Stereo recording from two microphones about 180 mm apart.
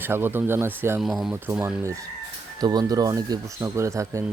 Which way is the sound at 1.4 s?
15° right (ahead or behind).